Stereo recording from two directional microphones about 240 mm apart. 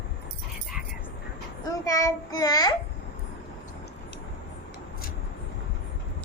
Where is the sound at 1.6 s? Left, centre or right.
Centre.